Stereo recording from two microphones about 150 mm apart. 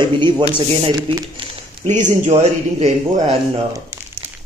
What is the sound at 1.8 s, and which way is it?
Speech, 55° right (ahead or behind).